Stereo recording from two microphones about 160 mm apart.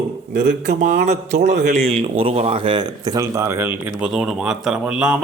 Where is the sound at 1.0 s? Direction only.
45° right (ahead or behind).